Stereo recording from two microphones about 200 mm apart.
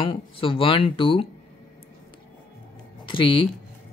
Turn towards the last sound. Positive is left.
turn(degrees=25)  # may be behind; listen again after turning